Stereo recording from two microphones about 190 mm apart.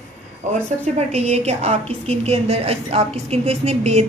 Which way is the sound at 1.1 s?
35° right (ahead or behind).